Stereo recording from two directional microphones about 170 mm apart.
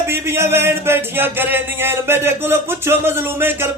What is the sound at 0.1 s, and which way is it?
Music, 15° right (ahead or behind).